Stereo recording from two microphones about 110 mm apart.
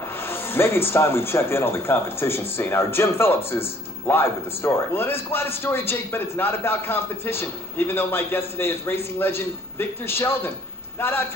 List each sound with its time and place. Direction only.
0.3 s speech: 20° left (ahead or behind)